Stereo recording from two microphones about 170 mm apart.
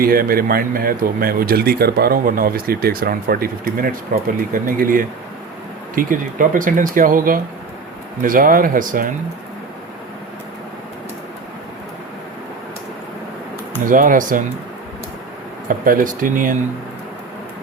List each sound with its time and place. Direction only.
0.0 s speech: 60° right (ahead or behind)
13.8 s speech: 50° right (ahead or behind)
15.8 s speech: 55° right (ahead or behind)